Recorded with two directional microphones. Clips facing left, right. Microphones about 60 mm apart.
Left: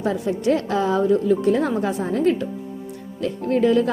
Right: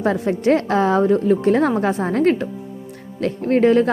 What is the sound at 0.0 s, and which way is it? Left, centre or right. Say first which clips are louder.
A woman's voice: right 3 dB; right.